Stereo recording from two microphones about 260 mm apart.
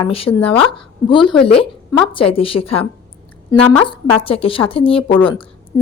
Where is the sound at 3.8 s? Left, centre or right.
Centre.